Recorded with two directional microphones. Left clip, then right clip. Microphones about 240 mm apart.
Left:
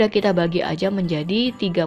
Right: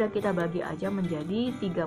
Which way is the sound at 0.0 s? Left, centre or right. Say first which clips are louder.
Left 9 dB; left.